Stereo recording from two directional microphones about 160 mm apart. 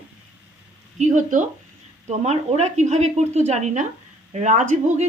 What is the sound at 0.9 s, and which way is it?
A woman's voice, 50° right (ahead or behind).